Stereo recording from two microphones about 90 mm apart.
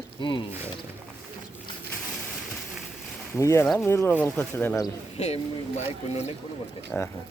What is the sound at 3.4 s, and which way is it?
Speech, 35° left (ahead or behind).